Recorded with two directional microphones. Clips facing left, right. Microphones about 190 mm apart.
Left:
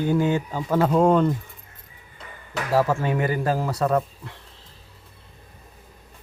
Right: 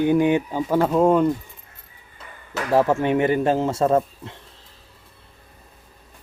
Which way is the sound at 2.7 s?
20° right (ahead or behind).